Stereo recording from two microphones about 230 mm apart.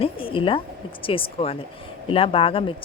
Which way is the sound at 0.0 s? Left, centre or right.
Left.